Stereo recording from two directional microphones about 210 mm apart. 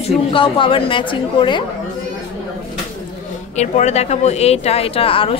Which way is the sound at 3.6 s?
30° left (ahead or behind).